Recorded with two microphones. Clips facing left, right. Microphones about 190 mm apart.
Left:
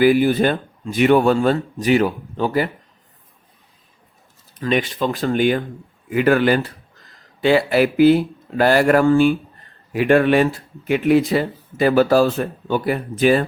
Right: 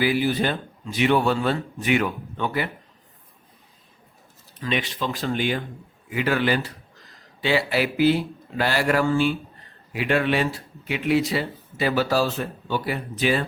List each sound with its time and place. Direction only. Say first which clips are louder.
0.0 s speech: left 8 dB; 50° left (ahead or behind)
4.6 s speech: left 7 dB; 50° left (ahead or behind)